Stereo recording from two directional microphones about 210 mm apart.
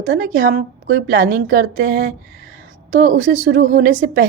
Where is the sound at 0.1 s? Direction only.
45° right (ahead or behind).